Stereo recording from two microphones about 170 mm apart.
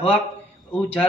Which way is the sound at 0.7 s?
10° left (ahead or behind).